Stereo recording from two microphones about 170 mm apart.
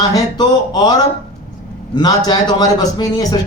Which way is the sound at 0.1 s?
25° left (ahead or behind).